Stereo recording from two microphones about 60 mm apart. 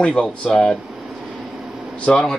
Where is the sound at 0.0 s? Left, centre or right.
Centre.